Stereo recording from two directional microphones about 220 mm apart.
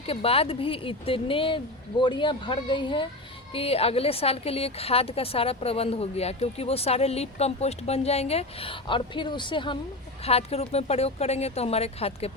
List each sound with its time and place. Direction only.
0.1 s a woman's voice: 25° left (ahead or behind)